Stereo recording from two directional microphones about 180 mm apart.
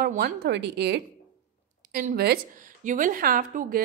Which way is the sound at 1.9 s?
50° right (ahead or behind).